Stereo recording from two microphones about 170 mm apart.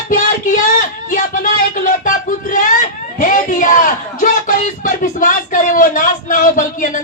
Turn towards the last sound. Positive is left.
turn(degrees=50)  # may be behind; listen again after turning